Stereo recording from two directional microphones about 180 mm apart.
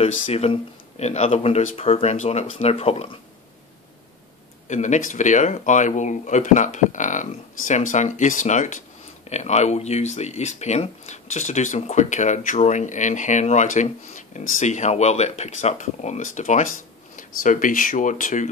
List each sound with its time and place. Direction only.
0.0 s speech: 35° left (ahead or behind)
4.6 s speech: 40° left (ahead or behind)